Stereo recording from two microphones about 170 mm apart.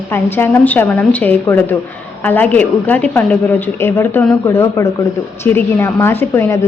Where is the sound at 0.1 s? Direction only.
10° left (ahead or behind).